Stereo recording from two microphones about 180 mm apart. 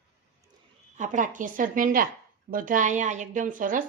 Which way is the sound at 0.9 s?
45° right (ahead or behind).